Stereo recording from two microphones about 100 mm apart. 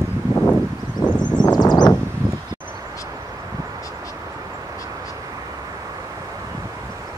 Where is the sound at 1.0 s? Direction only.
45° left (ahead or behind).